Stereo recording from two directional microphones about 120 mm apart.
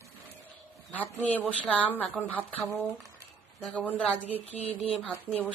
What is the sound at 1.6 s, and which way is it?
A woman's voice, 10° left (ahead or behind).